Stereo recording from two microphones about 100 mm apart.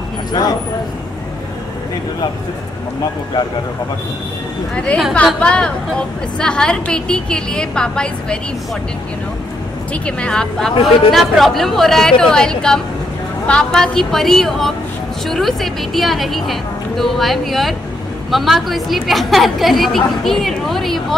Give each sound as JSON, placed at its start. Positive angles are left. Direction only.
{"t": 0.3, "sound": "speech", "side_deg": 40}
{"t": 4.7, "sound": "a woman's voice", "side_deg": 10}
{"t": 10.0, "sound": "a woman's voice", "side_deg": 10}